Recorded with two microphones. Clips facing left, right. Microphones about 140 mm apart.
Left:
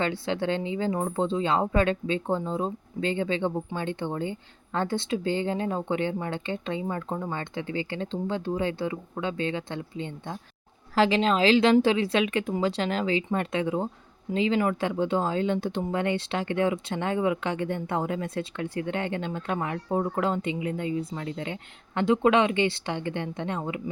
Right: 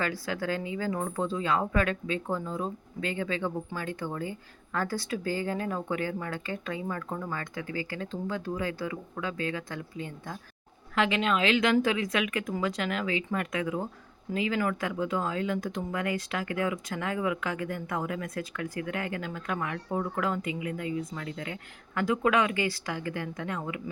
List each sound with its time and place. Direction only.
0.0 s speech: 25° left (ahead or behind)